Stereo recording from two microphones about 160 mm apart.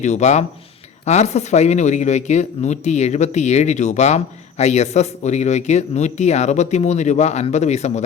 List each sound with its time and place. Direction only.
0.0 s speech: 45° left (ahead or behind)